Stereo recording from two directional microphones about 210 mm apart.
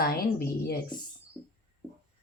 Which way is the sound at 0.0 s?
45° left (ahead or behind).